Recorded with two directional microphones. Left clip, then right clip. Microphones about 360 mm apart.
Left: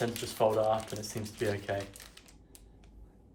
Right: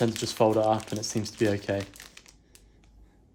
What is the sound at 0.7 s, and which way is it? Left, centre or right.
Speech, right.